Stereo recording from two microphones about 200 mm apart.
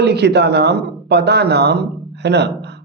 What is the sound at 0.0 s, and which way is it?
A man's voice, 55° right (ahead or behind).